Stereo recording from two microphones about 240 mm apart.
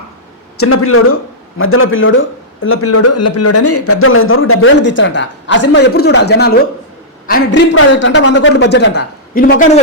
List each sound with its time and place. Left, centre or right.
0.5 s a man's voice: left